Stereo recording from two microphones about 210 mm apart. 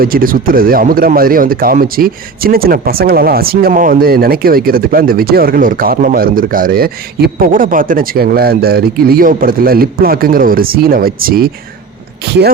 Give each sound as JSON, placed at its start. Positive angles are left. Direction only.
{"t": 0.0, "sound": "speech", "side_deg": -45}